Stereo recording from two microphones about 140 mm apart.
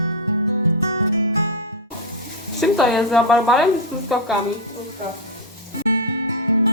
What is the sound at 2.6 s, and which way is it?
Speech, centre (ahead or behind).